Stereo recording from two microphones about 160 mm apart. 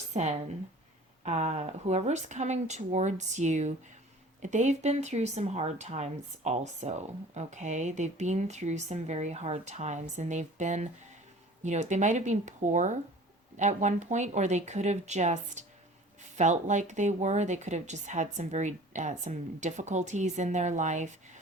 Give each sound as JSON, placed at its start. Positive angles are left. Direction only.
{"t": 0.1, "sound": "a woman's voice", "side_deg": -45}